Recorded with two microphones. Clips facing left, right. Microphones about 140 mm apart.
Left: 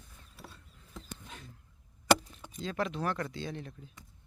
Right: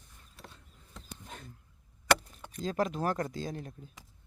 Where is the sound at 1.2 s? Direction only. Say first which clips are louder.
Right 2 dB; 50° right (ahead or behind).